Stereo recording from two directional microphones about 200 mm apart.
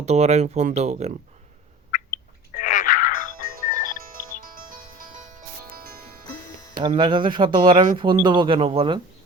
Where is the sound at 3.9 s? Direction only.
45° right (ahead or behind).